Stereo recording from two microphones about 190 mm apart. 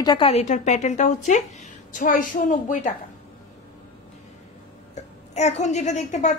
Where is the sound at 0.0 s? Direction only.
25° left (ahead or behind); by 2.5 s 45° left (ahead or behind).